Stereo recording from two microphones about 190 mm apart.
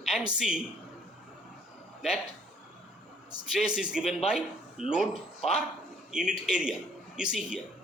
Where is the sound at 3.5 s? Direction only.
5° right (ahead or behind).